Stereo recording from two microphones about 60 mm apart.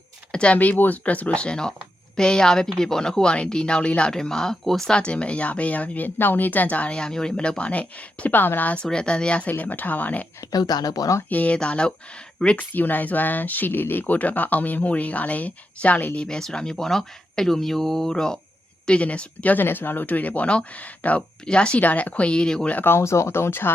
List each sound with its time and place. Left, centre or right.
0.3 s speech: centre
4.9 s speech: centre
8.8 s speech: centre
9.5 s speech: left
10.5 s speech: left
11.3 s speech: left
12.5 s speech: left
16.1 s speech: centre
18.9 s speech: centre
19.6 s speech: left; by 22.7 s centre
22.7 s speech: left
23.0 s speech: left